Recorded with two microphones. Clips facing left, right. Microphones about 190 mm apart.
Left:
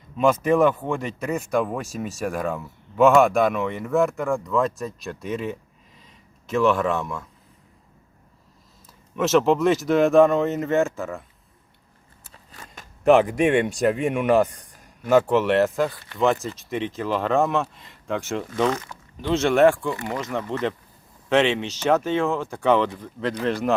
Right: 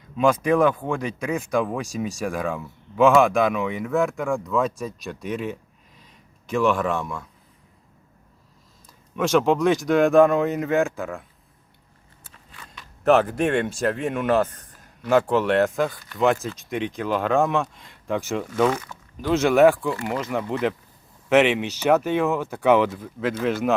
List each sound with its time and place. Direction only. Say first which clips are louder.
0.2 s speech: even; centre (ahead or behind)
9.1 s speech: left 1 dB; 5° left (ahead or behind)
12.3 s a sound: left 2 dB; 40° left (ahead or behind)
13.1 s speech: left 2 dB; centre (ahead or behind)
13.7 s speech: left 3 dB; 15° left (ahead or behind); by 23.7 s 5° right (ahead or behind)